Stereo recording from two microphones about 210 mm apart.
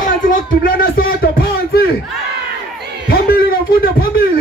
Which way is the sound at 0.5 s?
45° left (ahead or behind).